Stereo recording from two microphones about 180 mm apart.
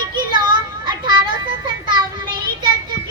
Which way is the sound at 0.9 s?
25° right (ahead or behind).